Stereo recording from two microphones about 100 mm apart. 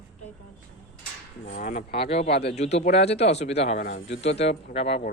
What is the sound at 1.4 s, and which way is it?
Speech, 85° left.